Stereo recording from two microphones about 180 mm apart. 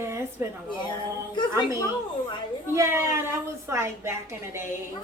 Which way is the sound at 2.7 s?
15° right (ahead or behind).